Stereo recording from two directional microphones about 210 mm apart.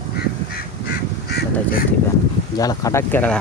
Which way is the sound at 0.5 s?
50° left (ahead or behind).